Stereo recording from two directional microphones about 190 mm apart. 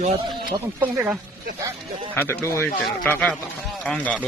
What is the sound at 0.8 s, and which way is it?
Speech, 10° right (ahead or behind).